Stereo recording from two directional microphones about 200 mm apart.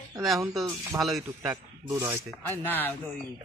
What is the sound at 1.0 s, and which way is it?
Speech, centre (ahead or behind).